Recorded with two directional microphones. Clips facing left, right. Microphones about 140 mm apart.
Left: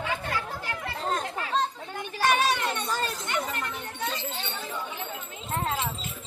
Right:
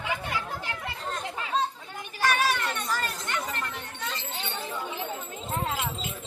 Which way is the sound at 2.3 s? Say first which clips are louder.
Left 2 dB; 15° left (ahead or behind).